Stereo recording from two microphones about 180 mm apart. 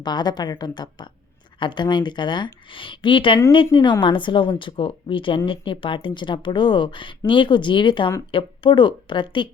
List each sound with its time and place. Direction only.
0.0 s speech: 25° left (ahead or behind)